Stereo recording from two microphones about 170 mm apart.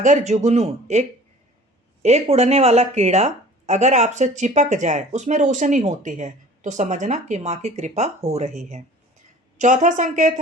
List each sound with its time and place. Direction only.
0.0 s speech: 45° right (ahead or behind)